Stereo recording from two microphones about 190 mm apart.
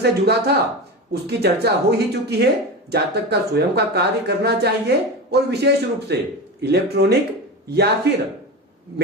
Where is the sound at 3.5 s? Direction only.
60° right (ahead or behind).